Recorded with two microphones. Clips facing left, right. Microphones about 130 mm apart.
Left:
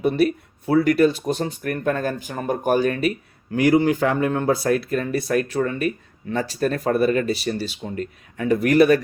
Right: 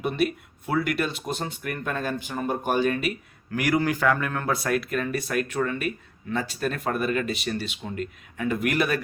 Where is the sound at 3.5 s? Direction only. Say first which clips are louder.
Left 7 dB; 25° left (ahead or behind).